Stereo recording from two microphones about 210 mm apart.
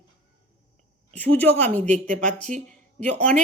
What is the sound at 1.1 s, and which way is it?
Speech, 10° left (ahead or behind).